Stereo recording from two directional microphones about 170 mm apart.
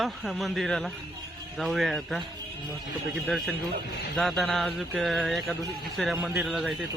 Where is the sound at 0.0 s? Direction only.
Centre (ahead or behind).